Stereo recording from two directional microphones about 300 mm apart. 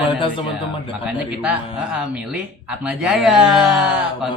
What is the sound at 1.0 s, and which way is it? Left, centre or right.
Speech, centre.